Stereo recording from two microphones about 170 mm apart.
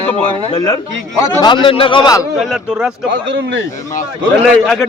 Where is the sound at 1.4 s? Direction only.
30° left (ahead or behind).